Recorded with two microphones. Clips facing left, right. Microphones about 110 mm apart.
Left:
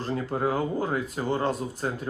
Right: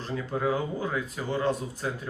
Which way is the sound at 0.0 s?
40° left (ahead or behind).